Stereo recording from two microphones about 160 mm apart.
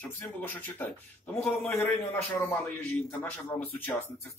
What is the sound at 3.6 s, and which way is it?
Speech, 10° left (ahead or behind).